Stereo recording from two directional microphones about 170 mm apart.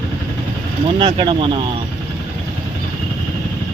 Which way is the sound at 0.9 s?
30° right (ahead or behind).